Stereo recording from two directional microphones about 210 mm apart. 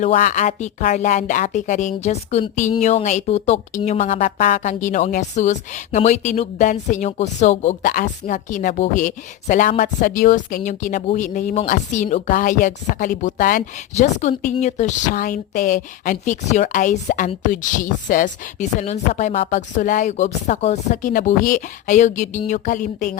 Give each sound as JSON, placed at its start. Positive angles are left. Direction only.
{"t": 0.0, "sound": "speech", "side_deg": 40}